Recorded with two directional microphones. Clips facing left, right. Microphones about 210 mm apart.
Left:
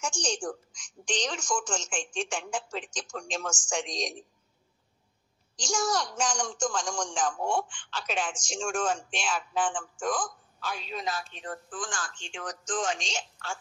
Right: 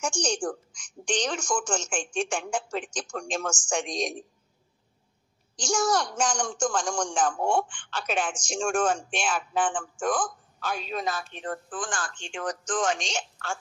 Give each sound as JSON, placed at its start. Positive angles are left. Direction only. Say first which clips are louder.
{"t": 0.0, "sound": "speech", "louder": "right 4 dB", "side_deg": -55}
{"t": 5.6, "sound": "speech", "louder": "right 4 dB", "side_deg": -55}